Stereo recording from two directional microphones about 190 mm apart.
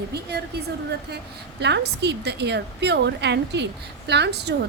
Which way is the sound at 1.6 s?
65° right (ahead or behind).